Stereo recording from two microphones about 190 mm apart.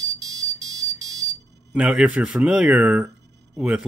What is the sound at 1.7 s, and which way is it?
Speech, 5° right (ahead or behind).